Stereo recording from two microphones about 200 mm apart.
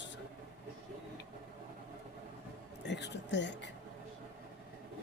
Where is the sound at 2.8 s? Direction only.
60° left (ahead or behind).